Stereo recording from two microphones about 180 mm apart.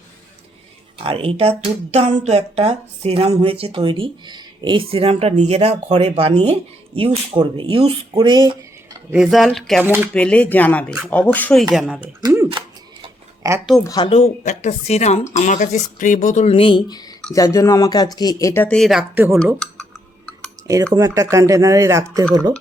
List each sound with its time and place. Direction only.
0.9 s speech: 30° right (ahead or behind)
8.1 s a sound: 25° right (ahead or behind)
9.1 s speech: centre (ahead or behind)
9.8 s speech: 10° right (ahead or behind)
10.2 s speech: 5° left (ahead or behind)
11.9 s speech: 20° right (ahead or behind)
12.5 s a sound: 25° right (ahead or behind)
13.8 s speech: 20° left (ahead or behind)
14.1 s speech: 40° left (ahead or behind); by 19.4 s 10° right (ahead or behind)
19.4 s typing: 5° left (ahead or behind)
20.9 s speech: 20° right (ahead or behind)